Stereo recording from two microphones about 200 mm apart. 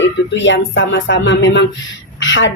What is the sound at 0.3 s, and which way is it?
Speech, 65° left (ahead or behind).